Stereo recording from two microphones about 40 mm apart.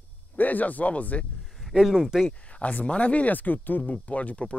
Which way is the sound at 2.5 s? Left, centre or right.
Left.